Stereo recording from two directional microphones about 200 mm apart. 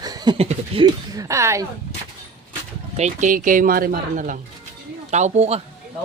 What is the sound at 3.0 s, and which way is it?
Speech, 40° right (ahead or behind).